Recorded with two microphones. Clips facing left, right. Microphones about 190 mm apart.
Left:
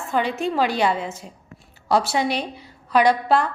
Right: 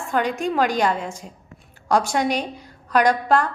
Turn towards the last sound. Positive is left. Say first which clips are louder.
# even
turn(degrees=10)  # may be behind; listen again after turning